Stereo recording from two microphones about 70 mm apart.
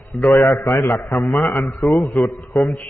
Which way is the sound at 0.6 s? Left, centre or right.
Left.